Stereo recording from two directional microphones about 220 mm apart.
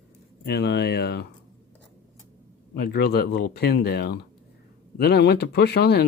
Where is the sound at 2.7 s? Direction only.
45° left (ahead or behind).